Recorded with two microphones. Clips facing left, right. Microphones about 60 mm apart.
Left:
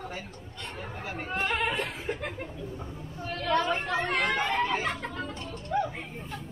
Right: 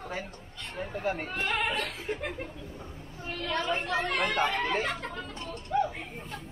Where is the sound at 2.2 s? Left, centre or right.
Centre.